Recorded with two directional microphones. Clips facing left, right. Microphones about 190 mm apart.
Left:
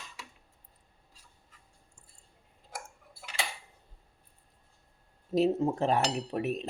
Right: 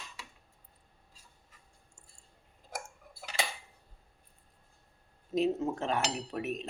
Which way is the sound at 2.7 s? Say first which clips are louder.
Right 2 dB; 40° right (ahead or behind).